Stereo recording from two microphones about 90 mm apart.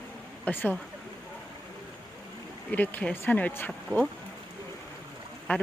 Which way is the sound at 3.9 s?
45° right (ahead or behind).